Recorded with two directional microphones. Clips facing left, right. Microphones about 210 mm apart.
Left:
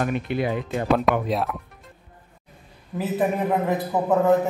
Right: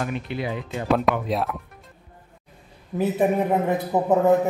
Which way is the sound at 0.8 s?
Centre (ahead or behind).